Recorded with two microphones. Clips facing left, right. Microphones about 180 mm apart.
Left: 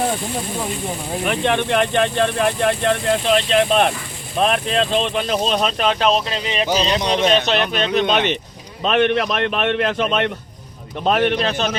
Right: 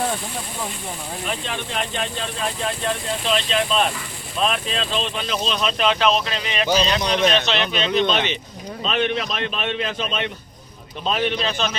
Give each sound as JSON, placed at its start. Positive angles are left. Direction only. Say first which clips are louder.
{"t": 1.2, "sound": "speech", "louder": "left 11 dB", "side_deg": 65}
{"t": 6.4, "sound": "speech", "louder": "left 1 dB", "side_deg": 25}
{"t": 7.4, "sound": "speech", "louder": "left 3 dB", "side_deg": 50}